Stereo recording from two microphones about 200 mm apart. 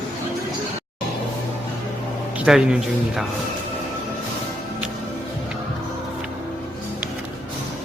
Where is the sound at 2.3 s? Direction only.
5° right (ahead or behind).